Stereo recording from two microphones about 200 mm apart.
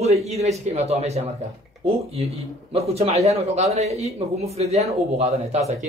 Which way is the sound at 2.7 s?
30° right (ahead or behind).